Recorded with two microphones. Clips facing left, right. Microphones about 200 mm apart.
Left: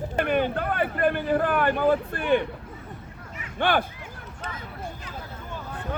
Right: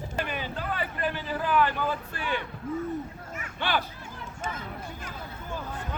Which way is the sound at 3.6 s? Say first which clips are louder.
Left 6 dB; 50° left (ahead or behind).